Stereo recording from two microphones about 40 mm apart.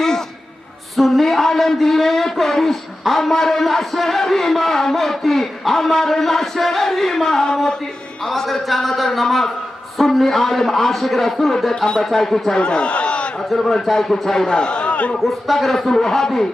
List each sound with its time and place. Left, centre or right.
0.0 s a sound: centre
0.9 s a man's voice: centre
12.5 s a man's voice: left
13.5 s a man's voice: centre; by 15.1 s left
15.2 s a man's voice: centre